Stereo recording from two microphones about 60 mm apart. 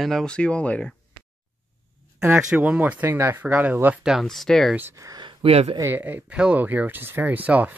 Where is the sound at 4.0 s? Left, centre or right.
Centre.